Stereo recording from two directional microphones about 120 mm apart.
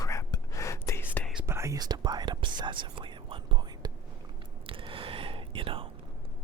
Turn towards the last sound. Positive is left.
turn(degrees=-45)  # may be behind; listen again after turning